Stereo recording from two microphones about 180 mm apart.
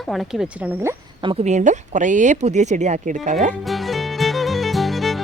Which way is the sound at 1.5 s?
40° right (ahead or behind).